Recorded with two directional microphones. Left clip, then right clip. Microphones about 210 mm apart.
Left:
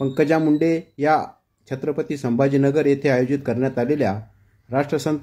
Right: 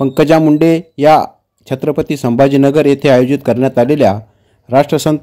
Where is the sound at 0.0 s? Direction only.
35° right (ahead or behind).